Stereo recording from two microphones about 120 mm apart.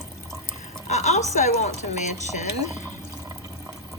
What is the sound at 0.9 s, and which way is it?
Speech, 70° left (ahead or behind).